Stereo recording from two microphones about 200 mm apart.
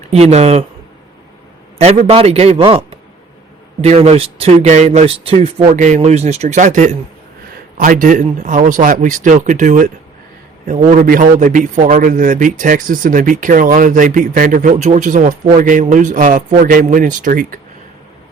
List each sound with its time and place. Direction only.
0.1 s a man's voice: 35° right (ahead or behind)
1.8 s a man's voice: 30° right (ahead or behind)